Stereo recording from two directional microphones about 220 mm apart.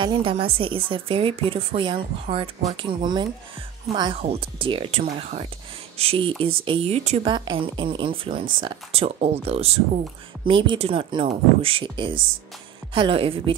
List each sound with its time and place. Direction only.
0.0 s speech: 25° right (ahead or behind)